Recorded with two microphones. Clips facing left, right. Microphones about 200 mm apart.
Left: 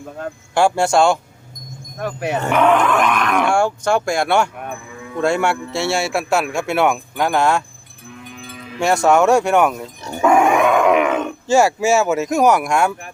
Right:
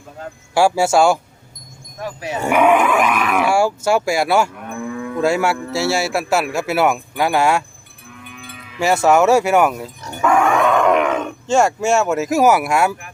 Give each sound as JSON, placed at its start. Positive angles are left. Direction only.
{"t": 0.5, "sound": "speech", "side_deg": -5}
{"t": 2.0, "sound": "speech", "side_deg": 60}
{"t": 2.4, "sound": "speech", "side_deg": -10}
{"t": 8.8, "sound": "speech", "side_deg": -5}
{"t": 10.0, "sound": "speech", "side_deg": 25}